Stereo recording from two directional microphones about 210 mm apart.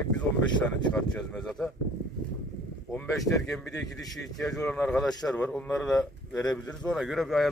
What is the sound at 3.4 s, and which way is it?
A man's voice, 5° left (ahead or behind).